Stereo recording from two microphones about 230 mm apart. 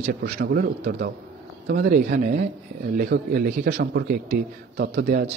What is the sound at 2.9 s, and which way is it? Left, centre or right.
Speech, right.